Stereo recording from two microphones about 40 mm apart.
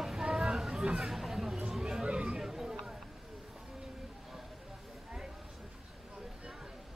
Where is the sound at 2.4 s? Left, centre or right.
Centre.